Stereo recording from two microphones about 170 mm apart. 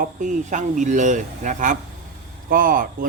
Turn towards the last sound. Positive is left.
turn(degrees=-55)  # may be behind; listen again after turning